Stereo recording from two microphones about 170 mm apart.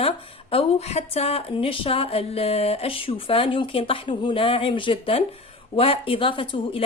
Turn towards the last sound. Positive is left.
turn(degrees=30)  # may be behind; listen again after turning